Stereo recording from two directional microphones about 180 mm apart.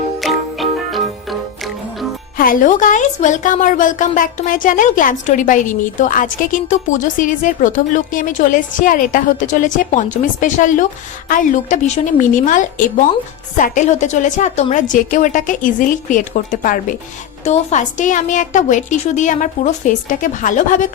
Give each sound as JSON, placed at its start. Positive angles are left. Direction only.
{"t": 0.2, "sound": "music", "side_deg": 0}
{"t": 2.4, "sound": "a woman's voice", "side_deg": 50}